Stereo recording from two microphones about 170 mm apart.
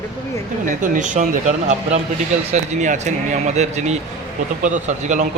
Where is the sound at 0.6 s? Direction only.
50° right (ahead or behind).